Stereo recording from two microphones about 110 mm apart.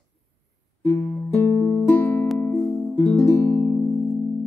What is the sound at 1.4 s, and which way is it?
Music, 25° left (ahead or behind).